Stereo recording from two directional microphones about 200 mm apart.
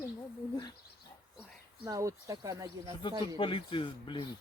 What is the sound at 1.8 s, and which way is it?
Speech, 15° right (ahead or behind).